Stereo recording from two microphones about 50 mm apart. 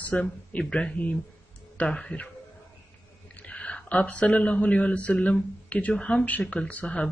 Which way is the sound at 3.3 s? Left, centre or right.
Left.